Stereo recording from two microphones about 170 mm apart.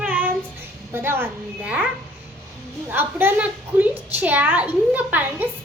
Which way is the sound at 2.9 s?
10° right (ahead or behind).